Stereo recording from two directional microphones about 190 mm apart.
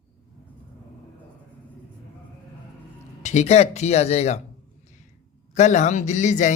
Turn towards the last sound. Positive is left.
turn(degrees=40)  # may be behind; listen again after turning